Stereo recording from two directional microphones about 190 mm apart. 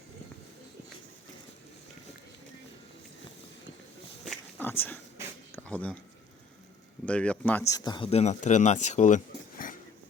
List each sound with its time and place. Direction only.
4.2 s a sound: 5° left (ahead or behind)
7.0 s speech: 5° left (ahead or behind)
7.7 s speech: 25° left (ahead or behind); by 9.7 s 45° left (ahead or behind)